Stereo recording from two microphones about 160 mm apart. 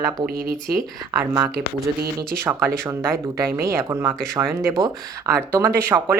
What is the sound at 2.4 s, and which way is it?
Speech, 15° right (ahead or behind).